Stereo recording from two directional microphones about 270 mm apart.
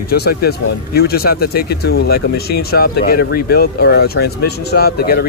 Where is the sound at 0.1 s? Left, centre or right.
Left.